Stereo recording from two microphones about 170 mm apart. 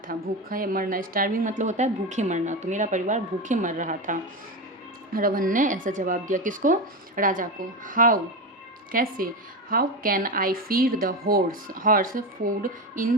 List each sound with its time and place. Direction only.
0.1 s a woman's voice: 55° right (ahead or behind)